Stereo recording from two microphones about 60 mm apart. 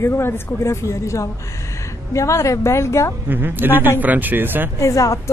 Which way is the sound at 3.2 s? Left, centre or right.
Right.